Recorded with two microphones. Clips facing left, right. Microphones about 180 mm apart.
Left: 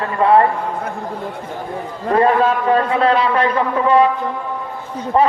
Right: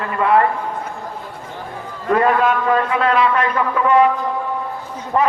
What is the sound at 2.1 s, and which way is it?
A man's voice, 30° left (ahead or behind).